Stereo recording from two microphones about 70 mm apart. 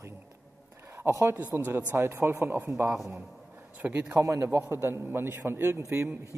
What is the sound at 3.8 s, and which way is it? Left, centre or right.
Speech, right.